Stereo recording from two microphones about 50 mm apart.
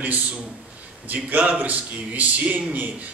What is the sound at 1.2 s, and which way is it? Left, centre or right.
A man's voice, right.